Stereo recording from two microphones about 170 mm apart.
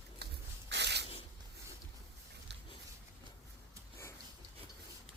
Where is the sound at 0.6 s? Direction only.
85° right.